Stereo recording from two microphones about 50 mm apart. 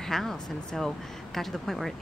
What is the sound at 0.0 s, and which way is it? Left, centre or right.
Speech, centre.